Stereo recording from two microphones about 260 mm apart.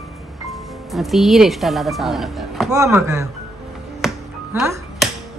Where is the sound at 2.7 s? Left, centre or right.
Centre.